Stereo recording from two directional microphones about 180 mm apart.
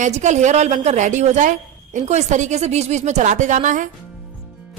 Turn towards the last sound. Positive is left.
turn(degrees=-45)  # may be behind; listen again after turning